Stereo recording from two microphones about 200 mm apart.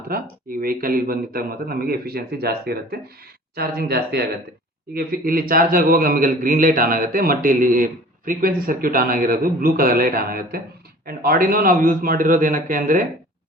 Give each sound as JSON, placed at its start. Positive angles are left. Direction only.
{"t": 0.1, "sound": "a man's voice", "side_deg": -45}